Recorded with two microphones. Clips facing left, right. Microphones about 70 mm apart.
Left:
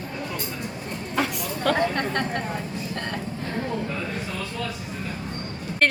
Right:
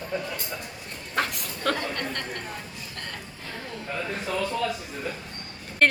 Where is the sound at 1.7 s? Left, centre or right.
Left.